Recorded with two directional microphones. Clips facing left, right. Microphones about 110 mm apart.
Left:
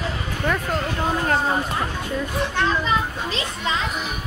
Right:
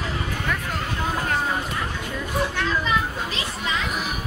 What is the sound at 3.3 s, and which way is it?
Speech, 30° left (ahead or behind).